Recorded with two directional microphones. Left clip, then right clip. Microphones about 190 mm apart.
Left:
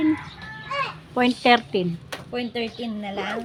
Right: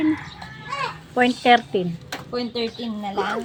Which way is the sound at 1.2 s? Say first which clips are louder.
Right 2 dB; 20° left (ahead or behind).